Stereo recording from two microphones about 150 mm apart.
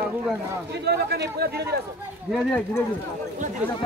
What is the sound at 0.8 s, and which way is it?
Speech, 90° right.